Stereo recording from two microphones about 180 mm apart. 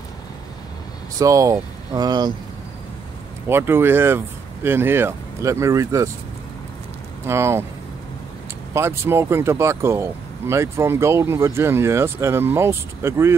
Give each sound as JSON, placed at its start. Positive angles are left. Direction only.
{"t": 1.1, "sound": "speech", "side_deg": -20}
{"t": 3.4, "sound": "speech", "side_deg": -15}
{"t": 7.2, "sound": "speech", "side_deg": -15}
{"t": 8.7, "sound": "speech", "side_deg": -15}